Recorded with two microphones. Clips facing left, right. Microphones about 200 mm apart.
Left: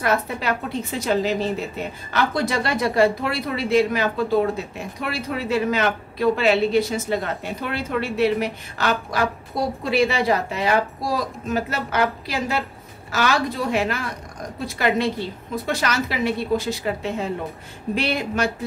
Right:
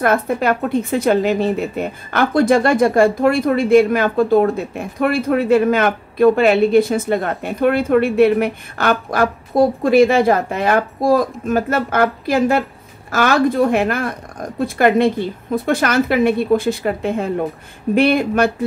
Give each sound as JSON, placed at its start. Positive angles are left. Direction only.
{"t": 0.0, "sound": "a woman's voice", "side_deg": -50}